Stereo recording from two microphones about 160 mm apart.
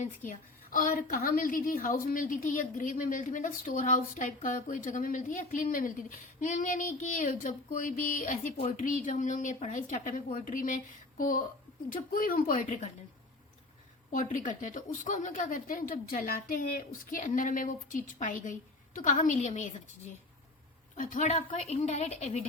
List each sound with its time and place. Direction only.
0.3 s a woman's voice: 55° left (ahead or behind)
14.1 s a woman's voice: 55° left (ahead or behind)
20.9 s a woman's voice: 50° left (ahead or behind)